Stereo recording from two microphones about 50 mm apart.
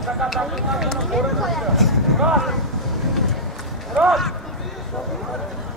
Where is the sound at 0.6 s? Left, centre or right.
Centre.